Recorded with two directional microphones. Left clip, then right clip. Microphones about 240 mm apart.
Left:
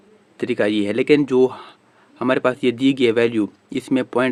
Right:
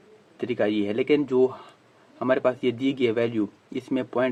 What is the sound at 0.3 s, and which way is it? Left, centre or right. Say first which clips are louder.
Speech: left 5 dB; left.